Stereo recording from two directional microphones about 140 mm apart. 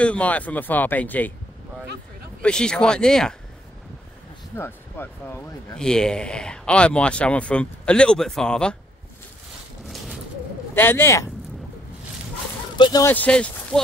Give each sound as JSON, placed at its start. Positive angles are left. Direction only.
{"t": 0.0, "sound": "speech", "side_deg": 10}
{"t": 2.4, "sound": "speech", "side_deg": 5}
{"t": 4.6, "sound": "speech", "side_deg": 15}
{"t": 5.8, "sound": "speech", "side_deg": 5}
{"t": 10.7, "sound": "speech", "side_deg": 15}
{"t": 12.7, "sound": "speech", "side_deg": 30}
{"t": 13.0, "sound": "speech", "side_deg": 10}